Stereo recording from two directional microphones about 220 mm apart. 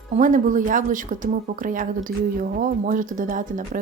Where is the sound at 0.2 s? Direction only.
35° right (ahead or behind).